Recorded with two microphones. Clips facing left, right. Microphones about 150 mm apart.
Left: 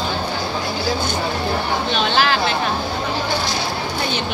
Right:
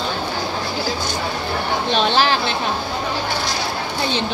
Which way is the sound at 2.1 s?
30° right (ahead or behind).